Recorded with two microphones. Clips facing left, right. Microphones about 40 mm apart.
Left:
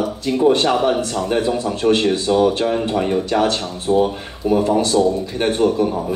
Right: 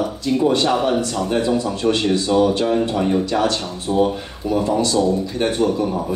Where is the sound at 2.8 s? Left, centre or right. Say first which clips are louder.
Even; left.